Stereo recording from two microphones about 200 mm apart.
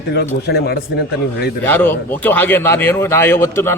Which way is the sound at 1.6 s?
10° left (ahead or behind).